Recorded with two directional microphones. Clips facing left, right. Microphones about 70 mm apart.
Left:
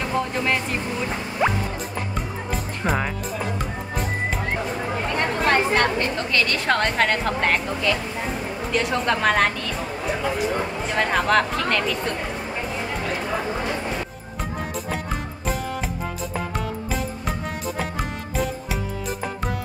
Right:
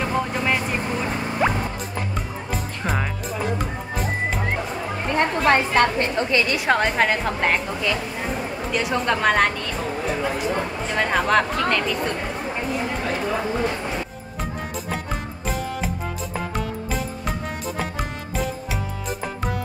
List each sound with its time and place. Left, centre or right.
0.1 s vehicle: centre
1.4 s music: centre
5.1 s a sound: right
6.3 s a woman's voice: centre
15.4 s music: centre